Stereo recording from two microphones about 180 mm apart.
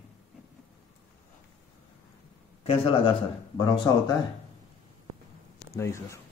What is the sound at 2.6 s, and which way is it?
Speech, 30° left (ahead or behind).